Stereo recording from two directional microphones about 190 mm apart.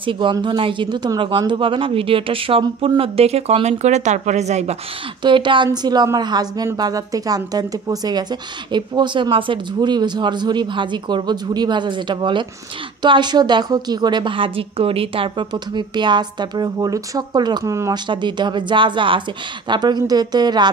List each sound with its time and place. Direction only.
0.0 s a woman's voice: 25° right (ahead or behind)
5.2 s a woman's voice: 25° right (ahead or behind)